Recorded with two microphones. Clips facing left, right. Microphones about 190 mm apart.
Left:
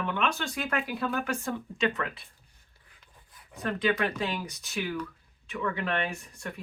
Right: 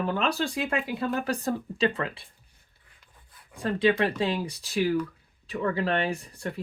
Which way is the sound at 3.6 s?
30° right (ahead or behind).